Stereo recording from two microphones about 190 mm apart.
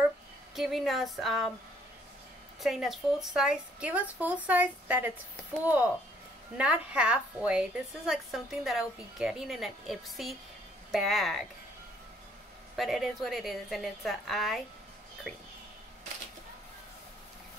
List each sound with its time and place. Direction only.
0.6 s a woman's voice: centre (ahead or behind)
2.6 s a woman's voice: centre (ahead or behind)
6.5 s a woman's voice: 5° right (ahead or behind)
12.7 s a woman's voice: centre (ahead or behind)